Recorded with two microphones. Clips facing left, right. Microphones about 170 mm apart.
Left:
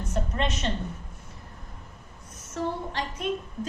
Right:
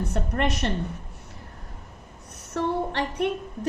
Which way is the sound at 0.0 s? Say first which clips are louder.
Right 3 dB; 65° right (ahead or behind).